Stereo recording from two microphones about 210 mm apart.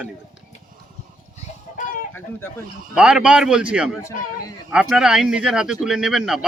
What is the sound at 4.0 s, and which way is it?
Speech, 15° left (ahead or behind).